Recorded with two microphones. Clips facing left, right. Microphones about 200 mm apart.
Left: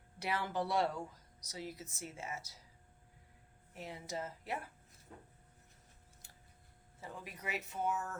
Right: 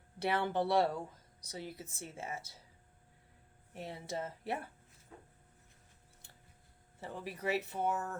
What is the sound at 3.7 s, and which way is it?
Speech, 30° right (ahead or behind).